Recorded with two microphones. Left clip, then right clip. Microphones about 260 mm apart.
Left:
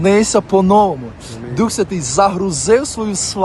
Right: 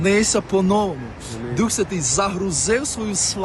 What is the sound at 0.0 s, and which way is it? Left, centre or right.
A man's voice, centre.